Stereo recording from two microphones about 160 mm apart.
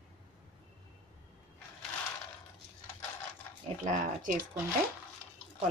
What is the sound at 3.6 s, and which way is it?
Speech, 50° right (ahead or behind).